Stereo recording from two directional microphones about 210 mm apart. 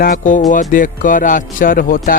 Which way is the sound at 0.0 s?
40° left (ahead or behind).